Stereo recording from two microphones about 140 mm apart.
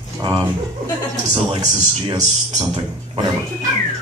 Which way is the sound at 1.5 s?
30° right (ahead or behind).